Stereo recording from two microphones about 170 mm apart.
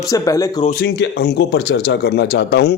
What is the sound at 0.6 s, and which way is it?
A man's voice, 60° left (ahead or behind).